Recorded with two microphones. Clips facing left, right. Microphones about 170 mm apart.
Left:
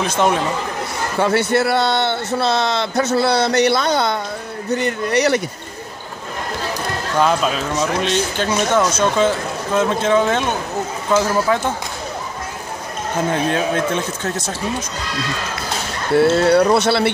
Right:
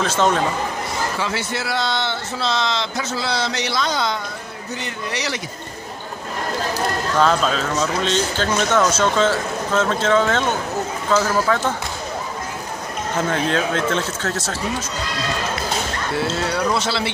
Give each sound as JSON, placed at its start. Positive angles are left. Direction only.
{"t": 0.0, "sound": "speech", "side_deg": 15}
{"t": 1.2, "sound": "a man's voice", "side_deg": 60}
{"t": 7.2, "sound": "speech", "side_deg": 10}
{"t": 13.3, "sound": "speech", "side_deg": 15}
{"t": 16.2, "sound": "a man's voice", "side_deg": 60}